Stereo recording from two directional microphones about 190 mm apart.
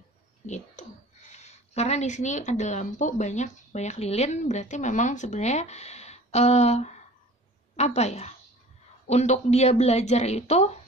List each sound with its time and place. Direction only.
0.8 s a woman's voice: 40° left (ahead or behind)